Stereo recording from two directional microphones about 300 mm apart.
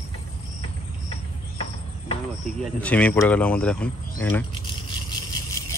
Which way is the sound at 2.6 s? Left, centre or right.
Centre.